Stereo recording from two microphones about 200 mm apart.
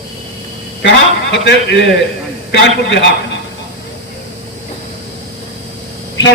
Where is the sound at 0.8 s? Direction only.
60° left (ahead or behind).